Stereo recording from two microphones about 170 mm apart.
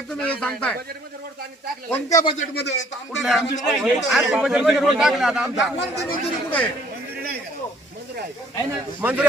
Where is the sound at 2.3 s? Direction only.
80° left.